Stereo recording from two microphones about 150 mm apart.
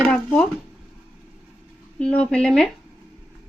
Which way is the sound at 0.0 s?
10° left (ahead or behind).